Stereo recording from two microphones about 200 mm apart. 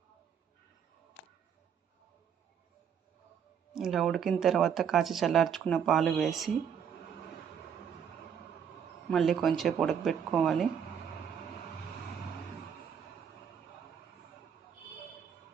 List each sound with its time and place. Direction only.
3.7 s speech: centre (ahead or behind)
9.0 s speech: centre (ahead or behind)